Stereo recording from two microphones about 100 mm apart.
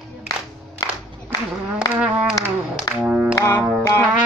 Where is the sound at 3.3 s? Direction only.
30° left (ahead or behind).